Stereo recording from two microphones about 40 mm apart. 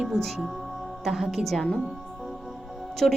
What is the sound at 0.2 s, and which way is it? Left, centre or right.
Speech, centre.